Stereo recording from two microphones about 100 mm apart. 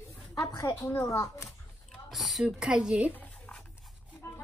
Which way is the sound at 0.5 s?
40° left (ahead or behind).